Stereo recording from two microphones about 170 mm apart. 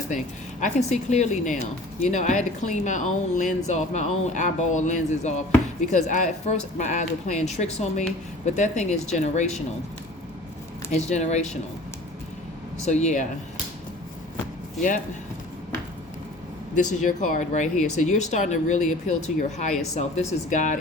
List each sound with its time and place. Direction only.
0.6 s speech: 45° left (ahead or behind)
10.9 s speech: 45° left (ahead or behind)
12.8 s speech: 40° left (ahead or behind)
14.8 s speech: 50° left (ahead or behind)
16.7 s speech: 45° left (ahead or behind)